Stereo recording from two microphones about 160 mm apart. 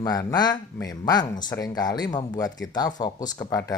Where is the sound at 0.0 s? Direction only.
25° left (ahead or behind).